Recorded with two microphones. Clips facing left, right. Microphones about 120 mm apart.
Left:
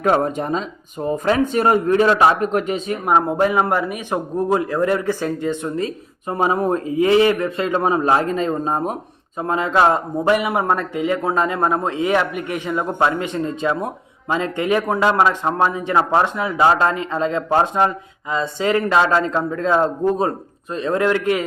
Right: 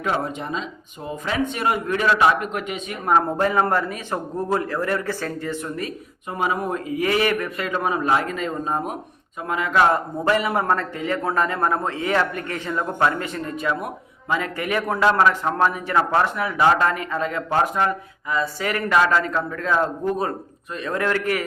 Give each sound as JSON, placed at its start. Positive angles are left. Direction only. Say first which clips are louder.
{"t": 0.0, "sound": "a man's voice", "louder": "left 7 dB", "side_deg": 50}
{"t": 3.1, "sound": "a man's voice", "louder": "left 2 dB", "side_deg": 20}